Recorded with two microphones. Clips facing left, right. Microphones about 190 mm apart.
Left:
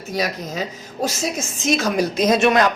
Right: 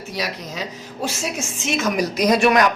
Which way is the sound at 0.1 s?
45° left (ahead or behind).